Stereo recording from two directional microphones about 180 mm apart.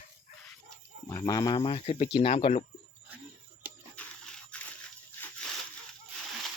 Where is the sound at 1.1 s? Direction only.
20° left (ahead or behind).